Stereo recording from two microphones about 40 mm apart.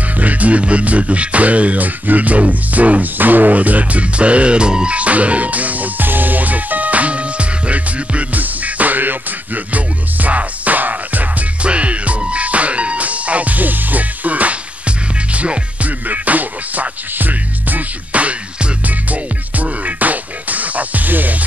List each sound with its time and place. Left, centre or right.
0.2 s music: right
4.9 s music: right
11.6 s music: right
16.1 s music: right